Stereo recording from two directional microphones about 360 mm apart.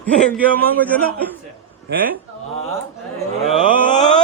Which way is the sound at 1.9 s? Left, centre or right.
Right.